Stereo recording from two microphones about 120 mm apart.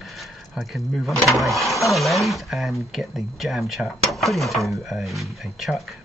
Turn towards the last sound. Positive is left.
turn(degrees=0)  # may be behind; listen again after turning